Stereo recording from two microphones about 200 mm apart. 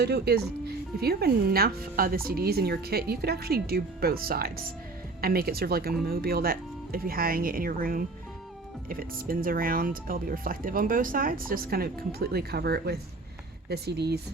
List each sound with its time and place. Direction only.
0.0 s speech: 55° right (ahead or behind)